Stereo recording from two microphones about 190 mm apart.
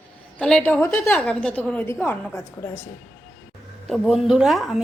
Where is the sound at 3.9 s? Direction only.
Centre (ahead or behind).